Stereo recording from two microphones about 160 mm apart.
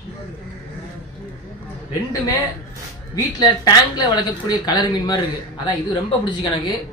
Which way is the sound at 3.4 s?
25° left (ahead or behind).